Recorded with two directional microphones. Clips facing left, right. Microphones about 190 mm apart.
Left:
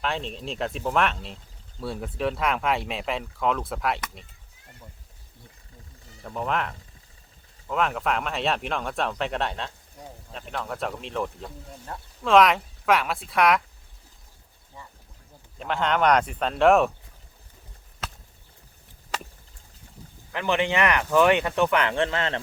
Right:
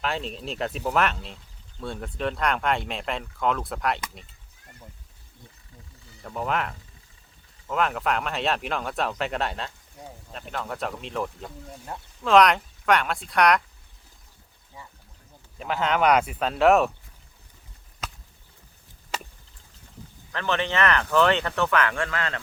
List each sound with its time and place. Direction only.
0.0 s speech: centre (ahead or behind)
6.2 s speech: centre (ahead or behind)
15.5 s speech: 5° right (ahead or behind)
20.3 s speech: 15° left (ahead or behind)